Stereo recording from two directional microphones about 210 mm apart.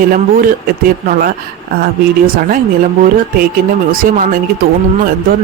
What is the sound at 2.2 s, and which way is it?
Speech, 45° right (ahead or behind).